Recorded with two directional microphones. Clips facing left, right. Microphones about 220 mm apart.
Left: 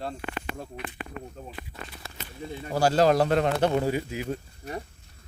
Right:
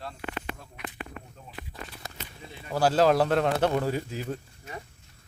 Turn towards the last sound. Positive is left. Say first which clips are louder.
# left 2 dB
turn(degrees=10)  # may be behind; listen again after turning